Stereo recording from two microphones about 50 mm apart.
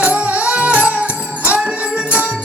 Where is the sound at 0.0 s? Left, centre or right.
Right.